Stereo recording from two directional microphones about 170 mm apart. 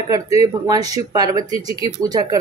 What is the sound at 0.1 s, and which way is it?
Speech, 20° right (ahead or behind).